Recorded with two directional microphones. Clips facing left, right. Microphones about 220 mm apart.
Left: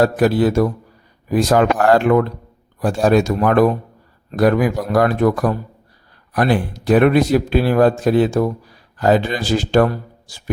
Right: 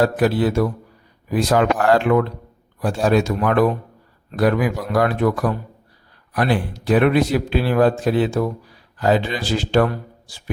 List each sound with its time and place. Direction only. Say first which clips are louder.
0.0 s a man's voice: left 3 dB; 45° left (ahead or behind)